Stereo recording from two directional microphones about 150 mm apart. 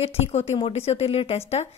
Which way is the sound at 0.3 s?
40° left (ahead or behind).